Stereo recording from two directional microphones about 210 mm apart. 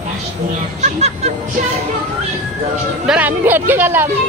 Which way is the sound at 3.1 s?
10° right (ahead or behind).